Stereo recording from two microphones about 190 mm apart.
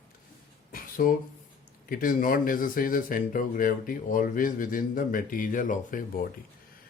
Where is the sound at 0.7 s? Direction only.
45° left (ahead or behind).